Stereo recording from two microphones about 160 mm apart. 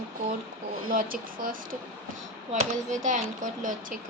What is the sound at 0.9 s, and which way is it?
Speech, 60° right (ahead or behind).